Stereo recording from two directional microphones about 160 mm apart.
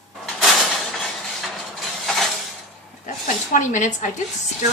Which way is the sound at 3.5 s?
50° left (ahead or behind).